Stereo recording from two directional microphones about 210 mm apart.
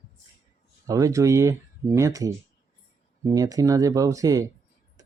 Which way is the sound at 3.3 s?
15° right (ahead or behind).